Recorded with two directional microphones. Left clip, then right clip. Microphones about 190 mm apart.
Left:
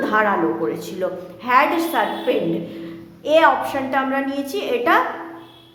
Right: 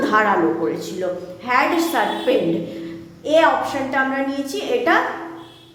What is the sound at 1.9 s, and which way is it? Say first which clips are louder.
Speech: right 1 dB; centre (ahead or behind).